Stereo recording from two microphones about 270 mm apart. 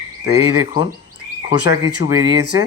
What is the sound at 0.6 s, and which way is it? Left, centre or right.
Speech, centre.